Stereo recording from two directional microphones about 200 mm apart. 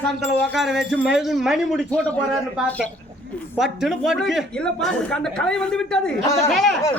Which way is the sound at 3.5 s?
Centre (ahead or behind).